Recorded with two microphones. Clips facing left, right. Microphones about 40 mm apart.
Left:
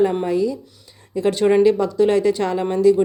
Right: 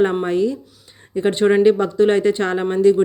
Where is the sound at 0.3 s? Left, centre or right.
Right.